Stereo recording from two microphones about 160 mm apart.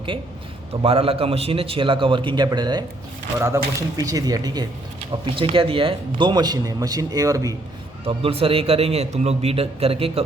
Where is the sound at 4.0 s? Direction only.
20° right (ahead or behind).